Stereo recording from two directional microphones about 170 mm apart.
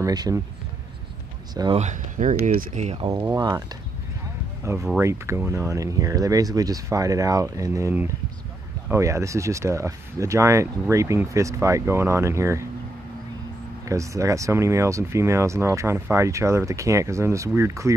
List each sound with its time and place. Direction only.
0.0 s speech: 20° right (ahead or behind)
1.5 s speech: 25° right (ahead or behind)
1.8 s speech: 45° right (ahead or behind)
3.0 s speech: 25° right (ahead or behind)
4.7 s speech: 15° right (ahead or behind)
13.8 s speech: 20° right (ahead or behind)